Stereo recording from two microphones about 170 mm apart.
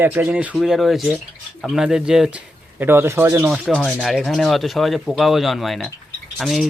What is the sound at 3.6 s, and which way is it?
Speech, 5° left (ahead or behind).